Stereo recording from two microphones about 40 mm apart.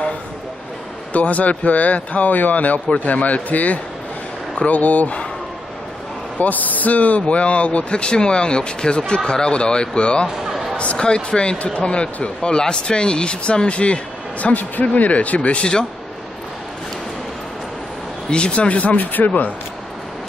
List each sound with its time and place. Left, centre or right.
1.1 s speech: left
6.3 s speech: left
10.2 s a sound: centre
10.8 s speech: left
14.5 s speech: left
18.3 s speech: left